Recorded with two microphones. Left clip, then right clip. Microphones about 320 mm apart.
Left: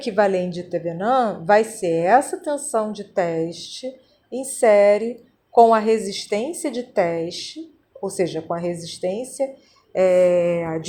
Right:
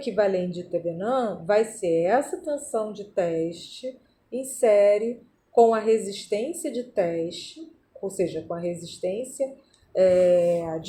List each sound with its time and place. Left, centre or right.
0.0 s speech: left